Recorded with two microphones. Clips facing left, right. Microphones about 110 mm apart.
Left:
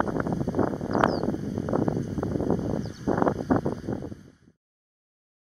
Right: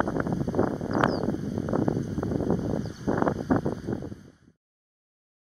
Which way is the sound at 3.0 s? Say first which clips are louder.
Left 1 dB; 25° left (ahead or behind).